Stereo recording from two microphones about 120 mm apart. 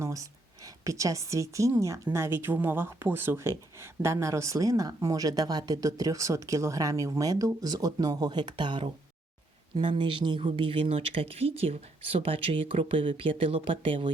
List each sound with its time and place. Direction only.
0.0 s speech: 25° right (ahead or behind); by 14.1 s 45° right (ahead or behind)